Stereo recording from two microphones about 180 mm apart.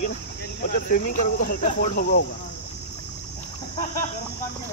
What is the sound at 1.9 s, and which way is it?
Speech, 50° left (ahead or behind).